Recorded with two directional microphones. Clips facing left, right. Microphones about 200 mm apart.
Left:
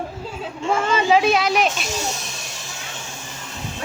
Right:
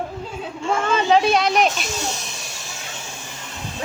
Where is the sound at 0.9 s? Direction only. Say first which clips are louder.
Even; 5° left (ahead or behind).